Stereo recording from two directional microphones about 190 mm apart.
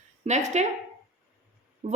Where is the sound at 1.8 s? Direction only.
35° right (ahead or behind).